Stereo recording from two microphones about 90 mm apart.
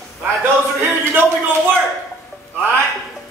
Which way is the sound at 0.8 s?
25° right (ahead or behind).